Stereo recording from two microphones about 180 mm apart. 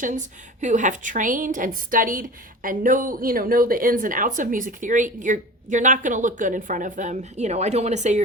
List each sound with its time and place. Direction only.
0.0 s a woman's voice: 45° right (ahead or behind)